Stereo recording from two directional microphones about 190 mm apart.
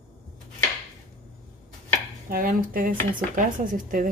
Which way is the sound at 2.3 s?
45° right (ahead or behind).